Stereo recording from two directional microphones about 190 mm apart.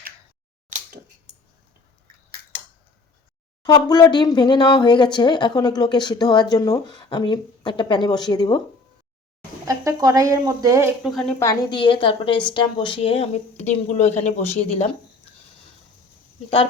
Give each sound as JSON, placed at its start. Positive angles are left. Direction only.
{"t": 3.6, "sound": "speech", "side_deg": 20}
{"t": 9.6, "sound": "speech", "side_deg": -15}
{"t": 11.0, "sound": "a woman's voice", "side_deg": 0}
{"t": 11.3, "sound": "speech", "side_deg": 20}